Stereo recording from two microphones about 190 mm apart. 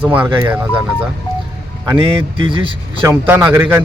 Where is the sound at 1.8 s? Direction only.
25° right (ahead or behind).